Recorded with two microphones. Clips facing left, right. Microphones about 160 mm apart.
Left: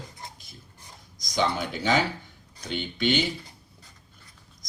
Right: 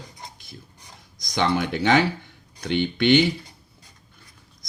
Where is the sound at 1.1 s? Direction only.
70° right (ahead or behind).